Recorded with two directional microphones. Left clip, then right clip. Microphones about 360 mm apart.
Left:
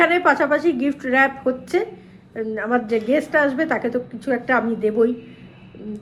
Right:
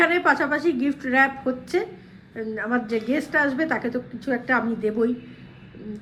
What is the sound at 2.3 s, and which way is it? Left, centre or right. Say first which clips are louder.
Speech: left 4 dB; left.